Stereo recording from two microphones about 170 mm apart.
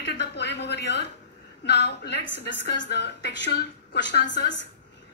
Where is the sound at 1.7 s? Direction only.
80° left.